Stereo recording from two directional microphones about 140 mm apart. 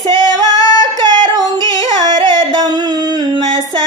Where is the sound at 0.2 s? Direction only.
25° left (ahead or behind).